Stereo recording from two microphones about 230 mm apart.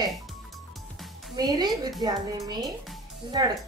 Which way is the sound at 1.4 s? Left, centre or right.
Centre.